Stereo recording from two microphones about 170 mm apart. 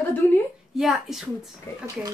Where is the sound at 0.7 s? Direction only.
Centre (ahead or behind).